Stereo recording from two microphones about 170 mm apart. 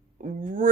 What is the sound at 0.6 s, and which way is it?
Speech, 50° right (ahead or behind).